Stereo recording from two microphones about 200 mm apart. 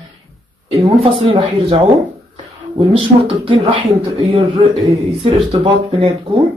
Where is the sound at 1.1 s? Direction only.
30° right (ahead or behind).